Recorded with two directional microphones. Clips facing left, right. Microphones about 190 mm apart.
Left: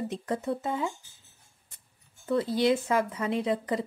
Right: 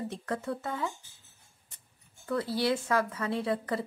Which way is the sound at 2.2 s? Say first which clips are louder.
Left 4 dB; 20° left (ahead or behind).